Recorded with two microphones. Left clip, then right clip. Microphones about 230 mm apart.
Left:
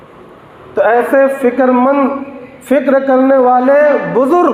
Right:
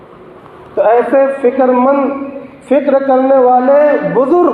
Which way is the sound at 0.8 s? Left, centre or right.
Left.